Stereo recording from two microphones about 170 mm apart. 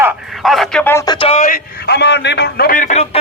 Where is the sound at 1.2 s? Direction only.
35° left (ahead or behind).